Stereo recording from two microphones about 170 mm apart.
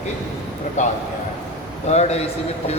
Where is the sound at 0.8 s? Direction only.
45° left (ahead or behind).